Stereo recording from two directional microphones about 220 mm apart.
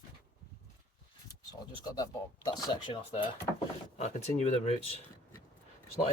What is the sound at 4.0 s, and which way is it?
Speech, 30° left (ahead or behind).